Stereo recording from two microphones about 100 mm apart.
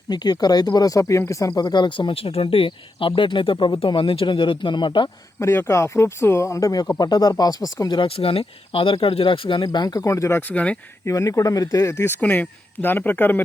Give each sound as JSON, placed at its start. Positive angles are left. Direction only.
{"t": 0.1, "sound": "speech", "side_deg": 45}
{"t": 5.4, "sound": "speech", "side_deg": 25}
{"t": 8.0, "sound": "speech", "side_deg": 70}
{"t": 9.6, "sound": "speech", "side_deg": 40}
{"t": 10.5, "sound": "speech", "side_deg": 15}
{"t": 11.0, "sound": "speech", "side_deg": 35}
{"t": 12.2, "sound": "speech", "side_deg": 20}